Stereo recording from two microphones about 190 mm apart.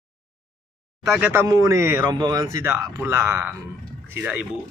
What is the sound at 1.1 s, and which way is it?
Speech, 10° right (ahead or behind).